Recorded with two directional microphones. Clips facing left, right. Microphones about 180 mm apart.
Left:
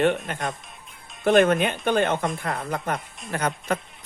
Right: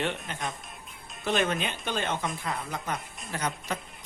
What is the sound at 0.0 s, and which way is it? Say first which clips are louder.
Speech: left 9 dB; 55° left (ahead or behind).